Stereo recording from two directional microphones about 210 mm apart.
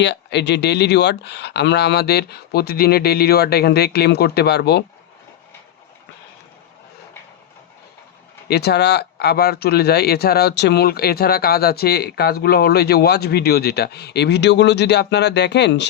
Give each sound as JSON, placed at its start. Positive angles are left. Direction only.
{"t": 0.0, "sound": "speech", "side_deg": 55}
{"t": 8.4, "sound": "speech", "side_deg": 50}